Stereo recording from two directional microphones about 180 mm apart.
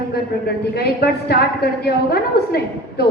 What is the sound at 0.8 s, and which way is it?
A woman's voice, 60° left (ahead or behind).